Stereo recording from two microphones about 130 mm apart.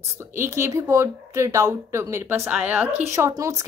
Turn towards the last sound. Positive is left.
turn(degrees=-25)  # may be behind; listen again after turning